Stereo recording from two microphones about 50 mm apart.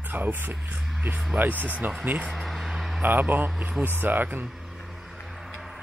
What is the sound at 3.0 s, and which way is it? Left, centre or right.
Speech, right.